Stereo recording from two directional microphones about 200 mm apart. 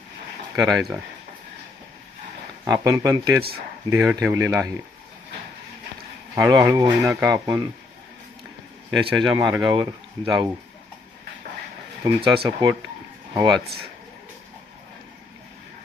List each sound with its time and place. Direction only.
0.6 s speech: centre (ahead or behind)
2.6 s speech: 15° right (ahead or behind)
6.3 s speech: 15° right (ahead or behind)
9.0 s speech: 20° right (ahead or behind)
12.0 s speech: 25° right (ahead or behind)